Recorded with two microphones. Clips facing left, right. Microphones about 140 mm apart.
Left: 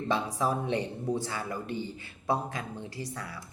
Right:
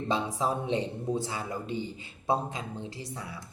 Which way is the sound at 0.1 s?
25° right (ahead or behind).